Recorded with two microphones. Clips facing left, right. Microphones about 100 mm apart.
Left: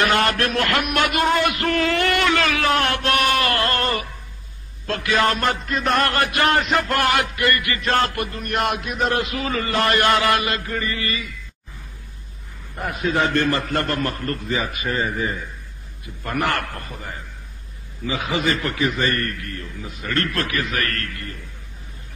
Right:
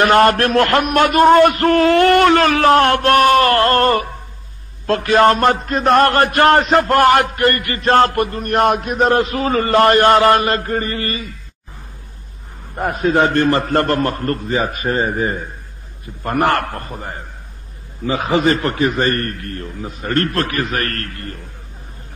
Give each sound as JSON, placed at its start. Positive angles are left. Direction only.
{"t": 0.0, "sound": "a sound", "side_deg": -45}
{"t": 4.8, "sound": "a man's voice", "side_deg": -40}
{"t": 12.7, "sound": "a man's voice", "side_deg": -40}